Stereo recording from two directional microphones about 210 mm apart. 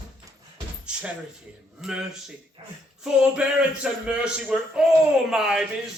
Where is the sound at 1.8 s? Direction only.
Centre (ahead or behind).